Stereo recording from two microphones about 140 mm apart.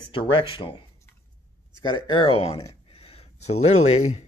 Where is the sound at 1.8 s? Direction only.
35° left (ahead or behind); by 4.2 s 55° left (ahead or behind).